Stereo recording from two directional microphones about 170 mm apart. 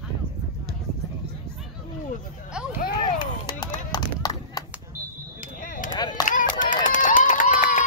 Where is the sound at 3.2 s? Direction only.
25° left (ahead or behind).